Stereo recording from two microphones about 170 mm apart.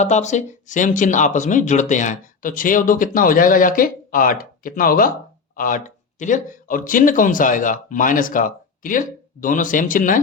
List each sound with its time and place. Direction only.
0.0 s speech: 45° left (ahead or behind)